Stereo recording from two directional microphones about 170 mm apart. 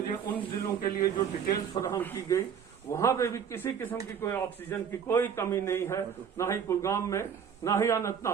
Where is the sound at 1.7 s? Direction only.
20° left (ahead or behind).